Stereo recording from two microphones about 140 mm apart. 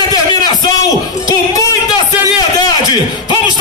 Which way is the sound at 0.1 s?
30° left (ahead or behind).